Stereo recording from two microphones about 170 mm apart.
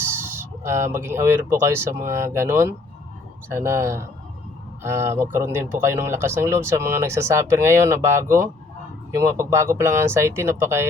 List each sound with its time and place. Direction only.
0.1 s speech: 15° right (ahead or behind)